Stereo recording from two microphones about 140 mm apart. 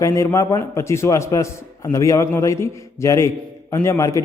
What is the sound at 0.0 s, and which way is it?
A man's voice, 20° left (ahead or behind).